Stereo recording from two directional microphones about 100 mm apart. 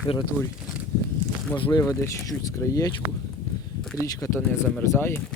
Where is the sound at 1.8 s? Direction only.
25° left (ahead or behind).